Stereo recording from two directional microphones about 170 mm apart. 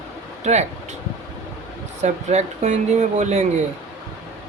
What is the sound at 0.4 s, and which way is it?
Speech, 40° right (ahead or behind).